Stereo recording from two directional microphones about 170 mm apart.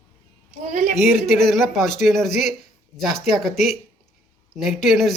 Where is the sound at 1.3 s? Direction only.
Centre (ahead or behind).